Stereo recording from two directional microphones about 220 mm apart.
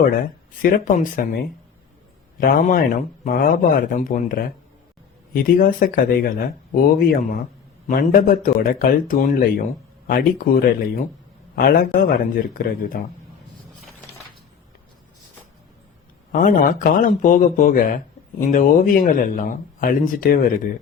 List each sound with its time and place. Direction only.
0.1 s speech: 40° left (ahead or behind)
7.9 s speech: 40° left (ahead or behind)
16.3 s speech: 40° left (ahead or behind)